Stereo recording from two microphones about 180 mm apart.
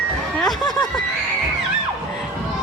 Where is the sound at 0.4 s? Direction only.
20° left (ahead or behind).